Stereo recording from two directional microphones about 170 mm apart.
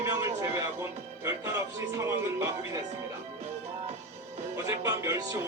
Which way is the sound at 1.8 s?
15° right (ahead or behind).